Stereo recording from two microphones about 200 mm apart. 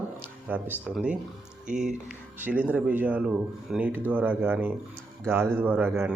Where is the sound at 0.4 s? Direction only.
10° right (ahead or behind).